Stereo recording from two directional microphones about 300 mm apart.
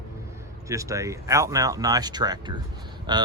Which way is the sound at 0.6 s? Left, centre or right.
Centre.